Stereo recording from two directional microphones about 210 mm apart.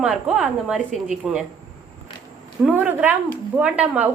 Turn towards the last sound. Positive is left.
turn(degrees=-5)  # may be behind; listen again after turning